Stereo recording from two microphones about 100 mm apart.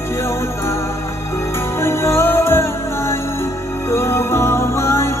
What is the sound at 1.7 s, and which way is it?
Music, 25° left (ahead or behind).